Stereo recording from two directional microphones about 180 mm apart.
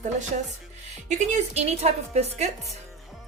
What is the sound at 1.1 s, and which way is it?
Speech, 40° right (ahead or behind).